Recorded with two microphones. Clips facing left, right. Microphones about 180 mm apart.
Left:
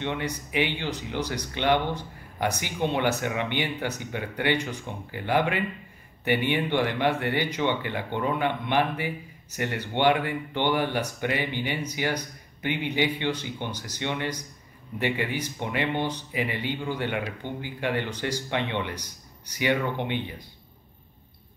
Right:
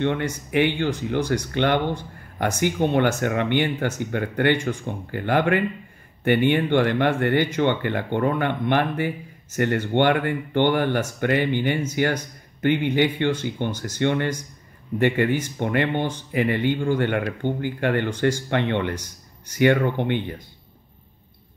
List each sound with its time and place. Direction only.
0.0 s speech: 55° right (ahead or behind)